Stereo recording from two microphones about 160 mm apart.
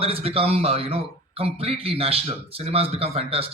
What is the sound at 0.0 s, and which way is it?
Speech, 35° right (ahead or behind).